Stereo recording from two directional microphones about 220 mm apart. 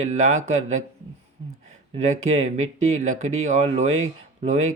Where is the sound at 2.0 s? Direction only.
30° right (ahead or behind).